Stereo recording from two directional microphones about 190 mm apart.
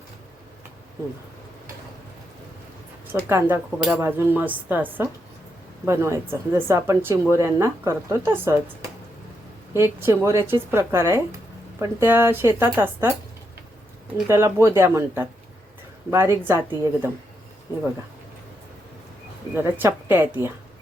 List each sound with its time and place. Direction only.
3.1 s speech: 10° right (ahead or behind)
9.7 s speech: 10° right (ahead or behind)
14.3 s speech: 15° right (ahead or behind)
19.5 s speech: 10° right (ahead or behind)